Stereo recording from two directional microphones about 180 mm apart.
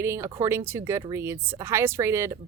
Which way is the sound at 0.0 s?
15° right (ahead or behind).